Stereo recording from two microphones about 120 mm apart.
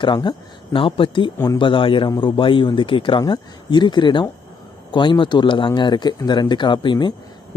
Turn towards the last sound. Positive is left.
turn(degrees=40)  # may be behind; listen again after turning